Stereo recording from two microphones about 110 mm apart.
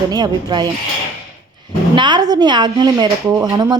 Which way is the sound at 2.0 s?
40° right (ahead or behind).